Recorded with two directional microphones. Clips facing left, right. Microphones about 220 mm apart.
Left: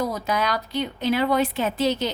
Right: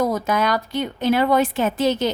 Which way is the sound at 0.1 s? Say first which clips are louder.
Right 4 dB; 50° right (ahead or behind).